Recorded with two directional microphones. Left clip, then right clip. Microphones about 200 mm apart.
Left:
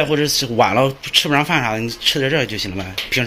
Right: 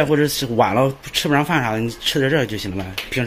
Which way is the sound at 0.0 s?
20° right (ahead or behind).